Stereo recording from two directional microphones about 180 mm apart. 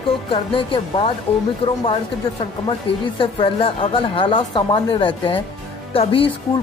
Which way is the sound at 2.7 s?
30° left (ahead or behind).